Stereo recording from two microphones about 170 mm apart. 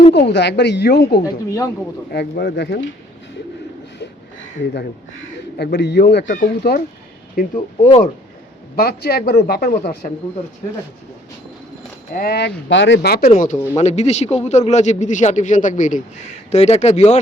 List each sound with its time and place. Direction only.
0.3 s speech: 90° left; by 1.2 s 70° left (ahead or behind)
1.2 s a woman's voice: 20° left (ahead or behind)
2.3 s speech: 75° left (ahead or behind)
4.6 s speech: 80° left
6.4 s speech: 65° left (ahead or behind)
7.3 s a man's voice: 50° left (ahead or behind)
8.7 s speech: 65° left (ahead or behind)
12.1 s speech: 65° left (ahead or behind)
13.3 s a man's voice: 45° left (ahead or behind)